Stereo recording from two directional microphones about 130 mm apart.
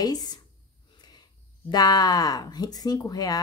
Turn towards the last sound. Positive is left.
turn(degrees=30)  # may be behind; listen again after turning